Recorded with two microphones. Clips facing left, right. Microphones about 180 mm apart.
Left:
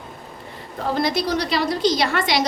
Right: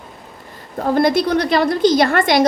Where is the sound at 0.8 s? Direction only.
50° right (ahead or behind).